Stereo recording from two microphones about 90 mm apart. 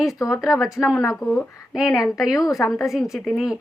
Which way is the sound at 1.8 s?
40° left (ahead or behind).